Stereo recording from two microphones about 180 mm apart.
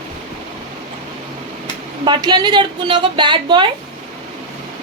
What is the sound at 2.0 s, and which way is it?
A woman's voice, 25° right (ahead or behind).